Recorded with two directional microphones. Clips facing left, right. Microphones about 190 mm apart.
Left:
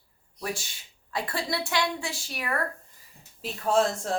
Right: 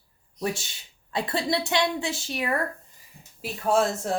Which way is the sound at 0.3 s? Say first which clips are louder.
Right 4 dB; 25° right (ahead or behind).